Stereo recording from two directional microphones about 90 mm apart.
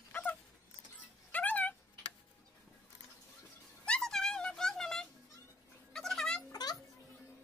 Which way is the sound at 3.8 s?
10° left (ahead or behind).